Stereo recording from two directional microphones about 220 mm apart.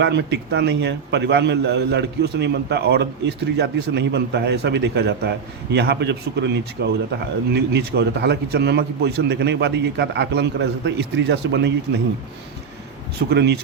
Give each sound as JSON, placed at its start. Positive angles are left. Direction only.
{"t": 0.0, "sound": "a man's voice", "side_deg": -50}
{"t": 13.1, "sound": "a man's voice", "side_deg": -50}